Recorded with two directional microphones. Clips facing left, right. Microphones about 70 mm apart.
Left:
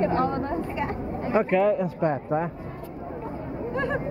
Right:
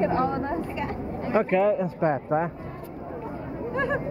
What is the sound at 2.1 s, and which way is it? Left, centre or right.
Speech, right.